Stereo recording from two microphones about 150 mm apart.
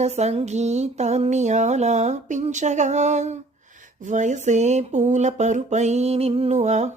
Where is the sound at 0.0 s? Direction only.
45° right (ahead or behind).